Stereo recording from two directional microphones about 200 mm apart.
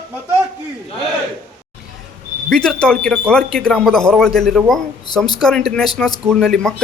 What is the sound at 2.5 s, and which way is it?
Speech, 5° left (ahead or behind).